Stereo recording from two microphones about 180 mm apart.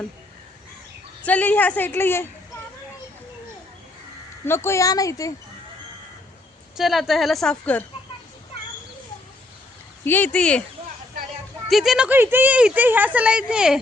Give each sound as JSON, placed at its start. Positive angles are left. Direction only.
{"t": 1.2, "sound": "a woman's voice", "side_deg": 10}
{"t": 4.4, "sound": "a woman's voice", "side_deg": 15}
{"t": 6.7, "sound": "a woman's voice", "side_deg": 0}
{"t": 10.0, "sound": "a woman's voice", "side_deg": 10}
{"t": 11.7, "sound": "speech", "side_deg": 0}